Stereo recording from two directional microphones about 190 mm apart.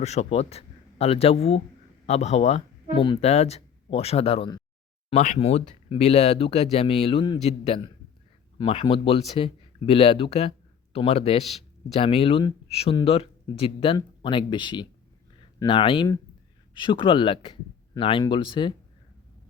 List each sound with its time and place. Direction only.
0.0 s speech: 35° left (ahead or behind)